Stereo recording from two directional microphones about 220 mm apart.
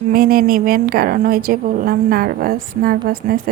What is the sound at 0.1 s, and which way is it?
A woman's voice, 40° right (ahead or behind).